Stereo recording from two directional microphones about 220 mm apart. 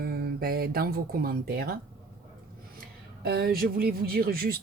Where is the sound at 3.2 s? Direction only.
45° right (ahead or behind).